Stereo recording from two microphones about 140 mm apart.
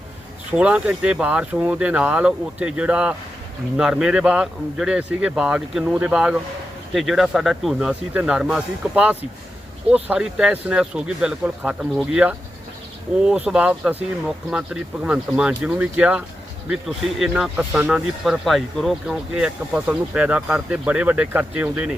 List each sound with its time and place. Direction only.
0.5 s speech: 5° right (ahead or behind)